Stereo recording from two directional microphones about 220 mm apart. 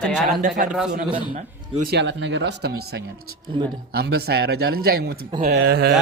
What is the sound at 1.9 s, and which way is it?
Speech, 55° right (ahead or behind).